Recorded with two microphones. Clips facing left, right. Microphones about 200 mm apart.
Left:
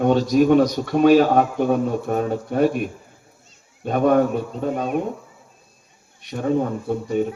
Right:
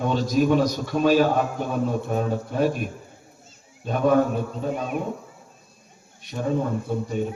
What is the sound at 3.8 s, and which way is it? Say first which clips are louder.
Speech: left 3 dB; 60° left (ahead or behind).